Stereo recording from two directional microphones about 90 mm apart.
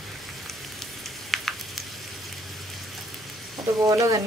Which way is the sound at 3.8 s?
40° right (ahead or behind).